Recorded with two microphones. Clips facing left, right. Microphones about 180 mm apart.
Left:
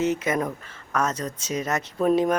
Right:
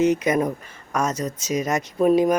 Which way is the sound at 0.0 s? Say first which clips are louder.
Right 5 dB; 15° right (ahead or behind).